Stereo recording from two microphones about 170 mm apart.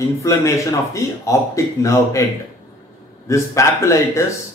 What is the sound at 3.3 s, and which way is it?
Speech, 15° left (ahead or behind).